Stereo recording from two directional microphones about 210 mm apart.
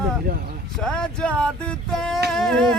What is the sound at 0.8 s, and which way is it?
Speech, 5° left (ahead or behind).